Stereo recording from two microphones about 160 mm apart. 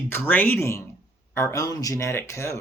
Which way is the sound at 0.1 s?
10° left (ahead or behind).